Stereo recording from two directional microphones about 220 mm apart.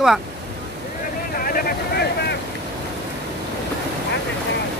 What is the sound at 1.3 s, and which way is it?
Vehicle, 40° left (ahead or behind).